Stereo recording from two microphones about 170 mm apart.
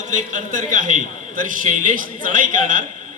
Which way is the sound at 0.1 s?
50° right (ahead or behind).